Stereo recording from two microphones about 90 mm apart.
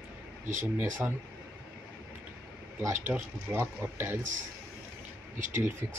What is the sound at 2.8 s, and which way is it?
Speech, 30° right (ahead or behind).